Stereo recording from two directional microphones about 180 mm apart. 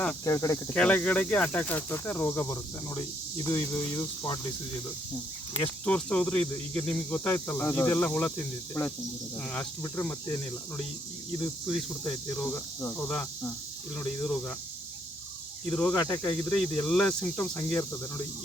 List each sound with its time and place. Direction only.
0.3 s speech: 15° left (ahead or behind)
5.8 s speech: 5° left (ahead or behind)
15.7 s speech: 5° left (ahead or behind)